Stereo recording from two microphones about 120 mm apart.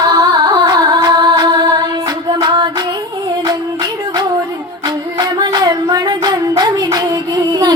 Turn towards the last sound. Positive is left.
turn(degrees=-35)  # may be behind; listen again after turning